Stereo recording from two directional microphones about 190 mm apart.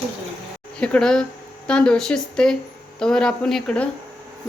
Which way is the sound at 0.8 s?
5° left (ahead or behind).